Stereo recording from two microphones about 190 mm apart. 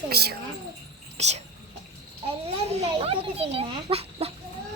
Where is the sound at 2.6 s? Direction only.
30° right (ahead or behind).